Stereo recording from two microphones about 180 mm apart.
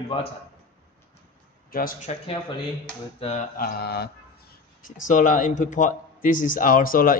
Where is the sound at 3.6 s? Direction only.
60° left (ahead or behind).